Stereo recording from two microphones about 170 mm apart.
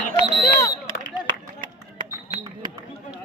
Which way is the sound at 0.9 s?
30° right (ahead or behind).